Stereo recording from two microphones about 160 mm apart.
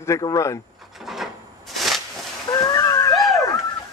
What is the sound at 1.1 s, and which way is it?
Wood, centre (ahead or behind).